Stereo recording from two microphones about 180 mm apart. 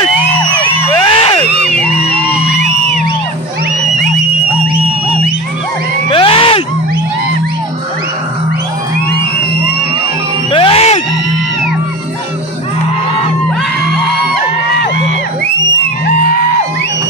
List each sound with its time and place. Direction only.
1.0 s a sound: 30° left (ahead or behind)
1.6 s music: 5° left (ahead or behind)
6.0 s crowd: 30° left (ahead or behind)
10.5 s music: 30° left (ahead or behind)